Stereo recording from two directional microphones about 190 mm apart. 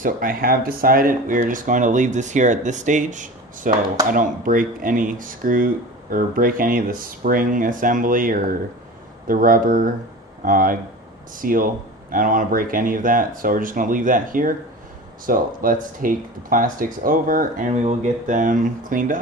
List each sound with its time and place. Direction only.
0.0 s speech: 45° right (ahead or behind)